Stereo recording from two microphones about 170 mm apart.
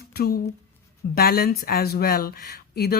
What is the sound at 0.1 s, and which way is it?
Speech, 65° left (ahead or behind).